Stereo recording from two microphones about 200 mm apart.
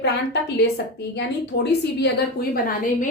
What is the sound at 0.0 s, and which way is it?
A woman's voice, 55° left (ahead or behind).